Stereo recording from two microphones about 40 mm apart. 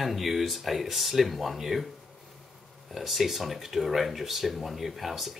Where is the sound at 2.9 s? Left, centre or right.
Centre.